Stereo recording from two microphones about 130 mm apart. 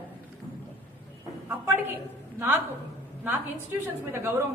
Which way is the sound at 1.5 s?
15° right (ahead or behind).